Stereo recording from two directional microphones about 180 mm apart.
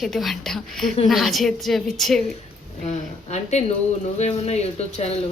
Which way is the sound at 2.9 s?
40° left (ahead or behind).